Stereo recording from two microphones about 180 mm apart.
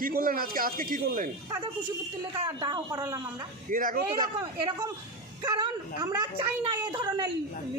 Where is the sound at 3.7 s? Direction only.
50° right (ahead or behind).